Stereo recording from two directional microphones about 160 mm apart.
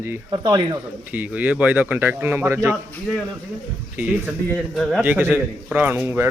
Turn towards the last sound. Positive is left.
turn(degrees=-15)  # may be behind; listen again after turning